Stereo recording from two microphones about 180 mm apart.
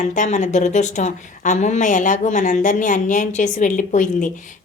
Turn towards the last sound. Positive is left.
turn(degrees=45)  # may be behind; listen again after turning